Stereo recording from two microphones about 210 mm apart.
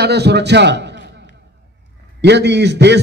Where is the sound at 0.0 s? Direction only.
50° right (ahead or behind).